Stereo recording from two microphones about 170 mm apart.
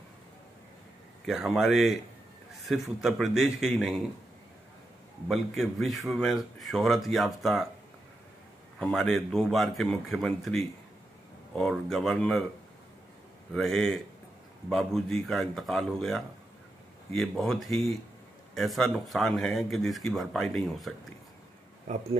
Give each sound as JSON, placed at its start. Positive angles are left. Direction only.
{"t": 1.2, "sound": "speech", "side_deg": 0}
{"t": 5.3, "sound": "speech", "side_deg": 0}
{"t": 8.7, "sound": "speech", "side_deg": 5}
{"t": 13.6, "sound": "speech", "side_deg": 0}
{"t": 21.9, "sound": "speech", "side_deg": -45}